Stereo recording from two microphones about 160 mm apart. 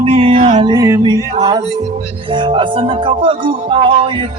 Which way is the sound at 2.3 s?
30° right (ahead or behind).